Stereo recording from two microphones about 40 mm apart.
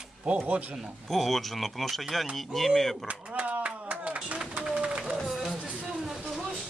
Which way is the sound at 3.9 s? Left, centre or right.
Right.